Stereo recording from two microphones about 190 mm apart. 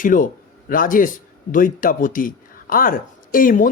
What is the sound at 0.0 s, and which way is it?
Speech, 45° left (ahead or behind).